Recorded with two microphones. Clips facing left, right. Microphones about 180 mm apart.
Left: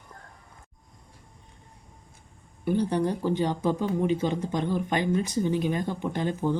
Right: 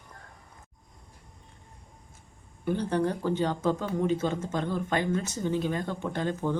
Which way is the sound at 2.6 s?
15° left (ahead or behind).